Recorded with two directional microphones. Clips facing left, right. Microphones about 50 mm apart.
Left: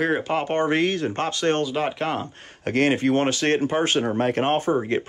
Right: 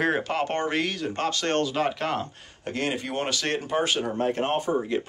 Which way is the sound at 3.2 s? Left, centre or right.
Left.